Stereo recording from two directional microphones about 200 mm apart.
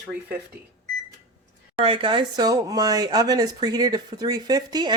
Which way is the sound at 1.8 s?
25° right (ahead or behind).